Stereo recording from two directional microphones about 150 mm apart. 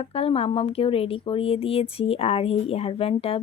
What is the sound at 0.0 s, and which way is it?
Speech, 40° left (ahead or behind).